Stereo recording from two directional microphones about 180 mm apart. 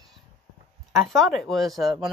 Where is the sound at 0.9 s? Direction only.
Centre (ahead or behind).